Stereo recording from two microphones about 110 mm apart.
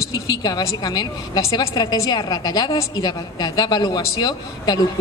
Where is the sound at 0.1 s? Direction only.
40° left (ahead or behind).